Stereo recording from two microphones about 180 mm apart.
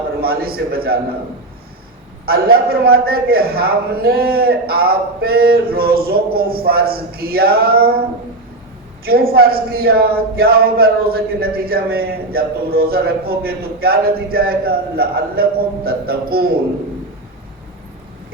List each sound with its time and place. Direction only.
0.2 s speech: 60° right (ahead or behind)
2.2 s speech: 55° right (ahead or behind)
9.0 s speech: 60° right (ahead or behind)